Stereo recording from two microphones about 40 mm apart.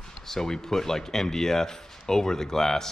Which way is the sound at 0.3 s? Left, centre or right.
Centre.